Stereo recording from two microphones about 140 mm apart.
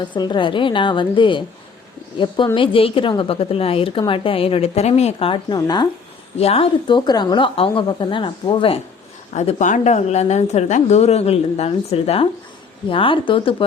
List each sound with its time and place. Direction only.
0.0 s a woman's voice: 35° left (ahead or behind)
5.5 s speech: 30° left (ahead or behind)
6.3 s a woman's voice: 45° left (ahead or behind)
9.3 s a woman's voice: 55° left (ahead or behind); by 13.7 s 40° left (ahead or behind)